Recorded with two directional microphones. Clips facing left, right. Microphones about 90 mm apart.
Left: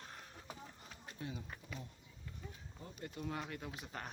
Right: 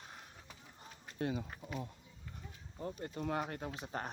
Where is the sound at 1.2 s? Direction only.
80° right.